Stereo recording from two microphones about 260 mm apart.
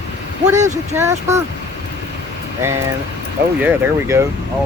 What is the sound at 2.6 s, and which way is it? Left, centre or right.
Speech, centre.